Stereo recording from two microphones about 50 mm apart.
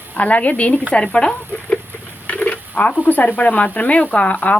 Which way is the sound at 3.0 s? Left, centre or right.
Left.